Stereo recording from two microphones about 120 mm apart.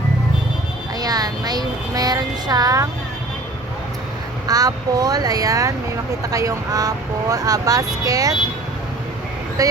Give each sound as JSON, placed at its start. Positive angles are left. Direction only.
{"t": 0.9, "sound": "speech", "side_deg": -30}
{"t": 4.4, "sound": "speech", "side_deg": -30}
{"t": 9.6, "sound": "speech", "side_deg": -30}